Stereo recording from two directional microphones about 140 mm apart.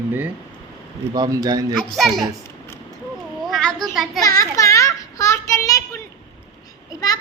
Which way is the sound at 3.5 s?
5° left (ahead or behind).